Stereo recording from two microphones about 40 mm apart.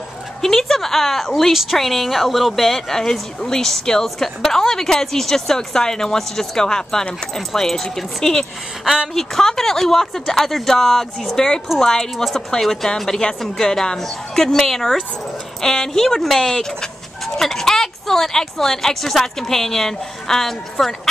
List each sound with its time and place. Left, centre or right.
0.4 s speech: centre
8.8 s speech: centre
9.1 s speech: centre